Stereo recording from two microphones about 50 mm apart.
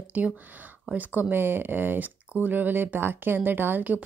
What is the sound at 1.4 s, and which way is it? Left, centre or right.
A woman's voice, right.